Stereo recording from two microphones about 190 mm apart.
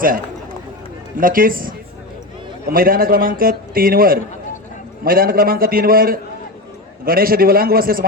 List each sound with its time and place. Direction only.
1.2 s a man's voice: 50° right (ahead or behind)